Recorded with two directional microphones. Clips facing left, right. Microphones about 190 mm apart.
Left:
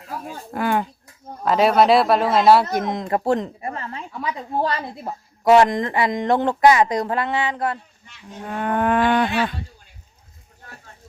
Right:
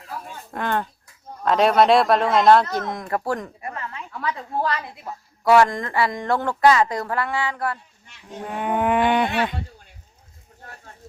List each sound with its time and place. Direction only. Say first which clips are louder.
0.5 s speech: left 3 dB; 10° left (ahead or behind)
2.6 s speech: left 4 dB; 20° left (ahead or behind)
4.1 s speech: even; 15° left (ahead or behind)
4.6 s a woman's voice: left 2 dB; 30° left (ahead or behind)
5.5 s speech: left 2 dB; 20° left (ahead or behind)
8.4 s livestock: left 1 dB; 10° right (ahead or behind)